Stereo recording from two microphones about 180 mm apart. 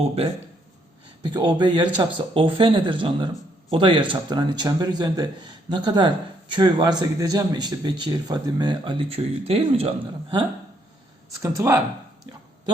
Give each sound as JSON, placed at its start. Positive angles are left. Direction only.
{"t": 1.2, "sound": "speech", "side_deg": -25}
{"t": 11.4, "sound": "speech", "side_deg": -15}